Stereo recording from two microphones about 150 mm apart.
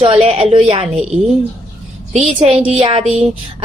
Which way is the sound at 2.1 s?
45° right (ahead or behind).